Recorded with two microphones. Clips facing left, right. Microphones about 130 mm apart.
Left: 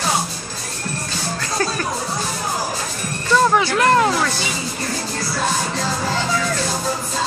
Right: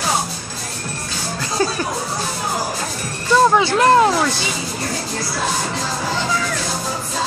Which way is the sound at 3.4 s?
20° right (ahead or behind).